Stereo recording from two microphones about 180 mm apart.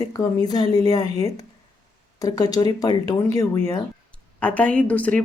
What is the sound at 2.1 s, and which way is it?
Speech, 20° left (ahead or behind).